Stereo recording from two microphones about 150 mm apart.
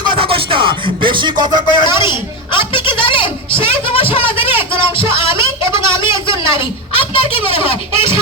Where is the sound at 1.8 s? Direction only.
30° left (ahead or behind).